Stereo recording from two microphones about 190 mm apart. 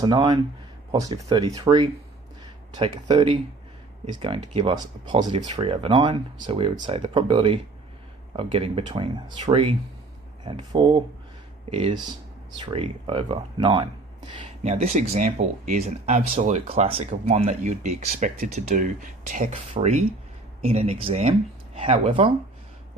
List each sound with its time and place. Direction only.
0.0 s speech: 25° right (ahead or behind)